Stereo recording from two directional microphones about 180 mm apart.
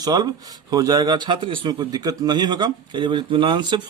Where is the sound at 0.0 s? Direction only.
20° right (ahead or behind).